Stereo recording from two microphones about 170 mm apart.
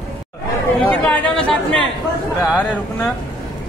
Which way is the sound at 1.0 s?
5° left (ahead or behind).